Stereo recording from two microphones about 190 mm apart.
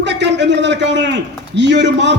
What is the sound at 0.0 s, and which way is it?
A man's voice, 65° right (ahead or behind).